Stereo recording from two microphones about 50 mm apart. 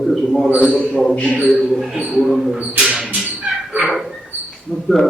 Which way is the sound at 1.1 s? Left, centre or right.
Left.